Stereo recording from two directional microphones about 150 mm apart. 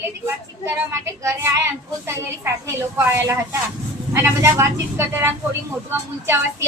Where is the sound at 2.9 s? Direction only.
15° right (ahead or behind).